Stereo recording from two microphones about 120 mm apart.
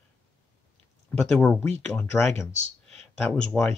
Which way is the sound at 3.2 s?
15° left (ahead or behind).